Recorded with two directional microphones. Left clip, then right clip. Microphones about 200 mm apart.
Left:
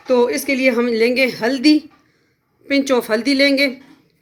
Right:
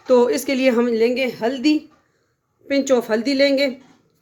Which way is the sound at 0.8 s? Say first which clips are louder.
Left 3 dB; centre (ahead or behind).